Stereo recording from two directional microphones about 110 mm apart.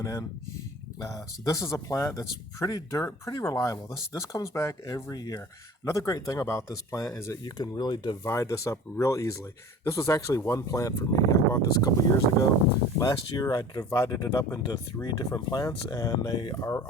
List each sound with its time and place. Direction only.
0.0 s speech: 30° left (ahead or behind)
8.2 s speech: 25° left (ahead or behind)
13.0 s speech: 35° left (ahead or behind)